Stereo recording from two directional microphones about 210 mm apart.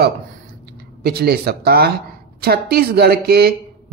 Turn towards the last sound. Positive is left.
turn(degrees=-50)  # may be behind; listen again after turning